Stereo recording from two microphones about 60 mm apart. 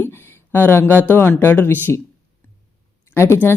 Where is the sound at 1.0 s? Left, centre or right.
Left.